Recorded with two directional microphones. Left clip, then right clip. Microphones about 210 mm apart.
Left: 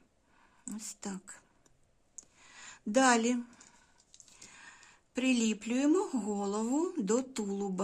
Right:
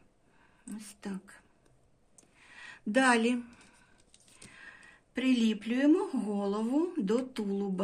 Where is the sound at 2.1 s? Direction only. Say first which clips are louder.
Even; 30° left (ahead or behind).